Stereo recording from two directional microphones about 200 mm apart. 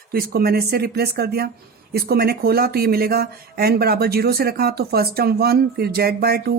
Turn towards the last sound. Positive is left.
turn(degrees=-50)  # may be behind; listen again after turning